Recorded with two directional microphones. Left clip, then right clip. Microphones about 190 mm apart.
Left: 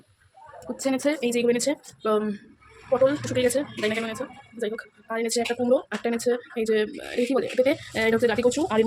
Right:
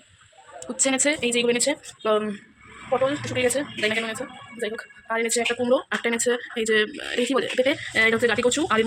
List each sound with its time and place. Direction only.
0.7 s speech: 10° left (ahead or behind)
2.1 s a man's voice: 5° left (ahead or behind)
3.0 s speech: 30° left (ahead or behind)
3.4 s speech: 15° left (ahead or behind)